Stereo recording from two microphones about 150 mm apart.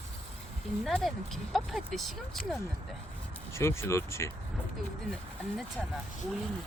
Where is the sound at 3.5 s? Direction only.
20° left (ahead or behind).